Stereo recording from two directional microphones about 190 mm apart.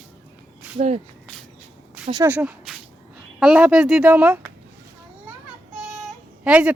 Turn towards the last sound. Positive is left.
turn(degrees=-5)  # may be behind; listen again after turning